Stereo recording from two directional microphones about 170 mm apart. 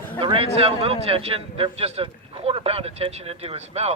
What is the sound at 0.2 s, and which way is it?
A man's voice, 35° right (ahead or behind).